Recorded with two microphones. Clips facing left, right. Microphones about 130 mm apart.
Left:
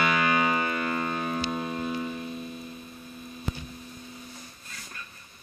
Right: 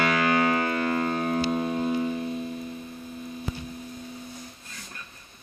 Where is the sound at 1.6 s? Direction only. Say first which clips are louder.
Right 5 dB; 25° right (ahead or behind).